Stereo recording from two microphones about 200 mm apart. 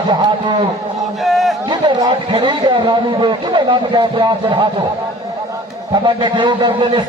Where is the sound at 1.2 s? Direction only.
Centre (ahead or behind).